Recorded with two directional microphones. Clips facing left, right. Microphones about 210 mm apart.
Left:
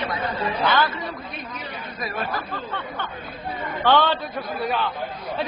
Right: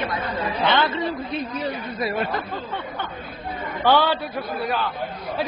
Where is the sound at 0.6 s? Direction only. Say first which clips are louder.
Right 1 dB; 25° right (ahead or behind).